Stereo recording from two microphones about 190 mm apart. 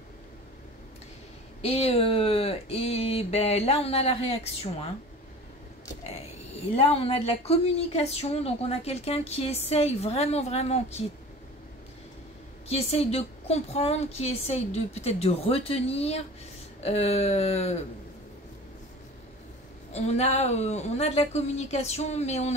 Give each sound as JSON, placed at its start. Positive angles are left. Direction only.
{"t": 1.6, "sound": "speech", "side_deg": 30}
{"t": 6.7, "sound": "a woman's voice", "side_deg": 30}
{"t": 12.6, "sound": "a woman's voice", "side_deg": 30}
{"t": 19.9, "sound": "a woman's voice", "side_deg": 35}